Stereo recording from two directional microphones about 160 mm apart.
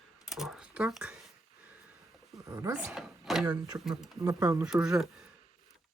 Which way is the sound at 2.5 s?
20° right (ahead or behind).